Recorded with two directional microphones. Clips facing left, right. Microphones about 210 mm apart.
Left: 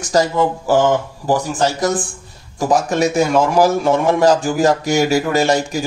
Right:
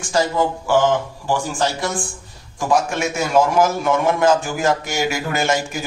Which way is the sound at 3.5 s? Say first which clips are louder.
Left 3 dB; 35° left (ahead or behind).